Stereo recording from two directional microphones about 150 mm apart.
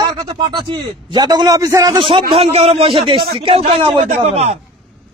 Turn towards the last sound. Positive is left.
turn(degrees=-45)  # may be behind; listen again after turning